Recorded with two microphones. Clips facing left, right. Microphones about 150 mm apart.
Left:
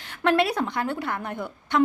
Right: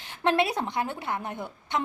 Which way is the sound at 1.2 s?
60° left (ahead or behind).